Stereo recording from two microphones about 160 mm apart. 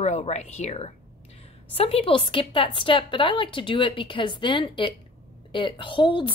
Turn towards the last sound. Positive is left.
turn(degrees=30)  # may be behind; listen again after turning